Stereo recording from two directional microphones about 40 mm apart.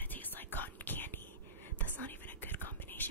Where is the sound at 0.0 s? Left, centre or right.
Left.